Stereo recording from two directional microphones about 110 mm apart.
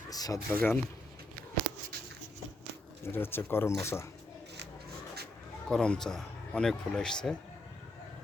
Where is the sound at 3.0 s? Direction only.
20° left (ahead or behind).